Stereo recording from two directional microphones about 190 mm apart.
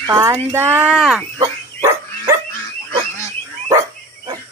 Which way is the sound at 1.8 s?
15° right (ahead or behind).